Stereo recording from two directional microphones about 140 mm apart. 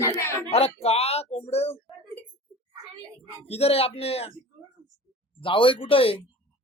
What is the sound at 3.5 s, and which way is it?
Speech, 45° left (ahead or behind).